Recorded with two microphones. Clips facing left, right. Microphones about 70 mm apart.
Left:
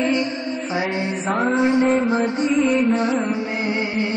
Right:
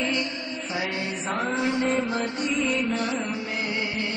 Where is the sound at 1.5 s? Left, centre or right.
Left.